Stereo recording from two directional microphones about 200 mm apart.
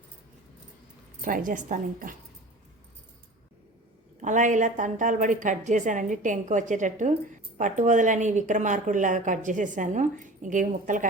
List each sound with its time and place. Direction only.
1.2 s a woman's voice: 40° right (ahead or behind)
4.2 s a woman's voice: 40° right (ahead or behind)